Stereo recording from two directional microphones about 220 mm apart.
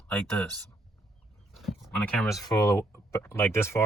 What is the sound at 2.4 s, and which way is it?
Speech, 15° left (ahead or behind).